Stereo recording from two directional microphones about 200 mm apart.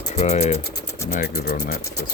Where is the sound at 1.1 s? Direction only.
45° left (ahead or behind).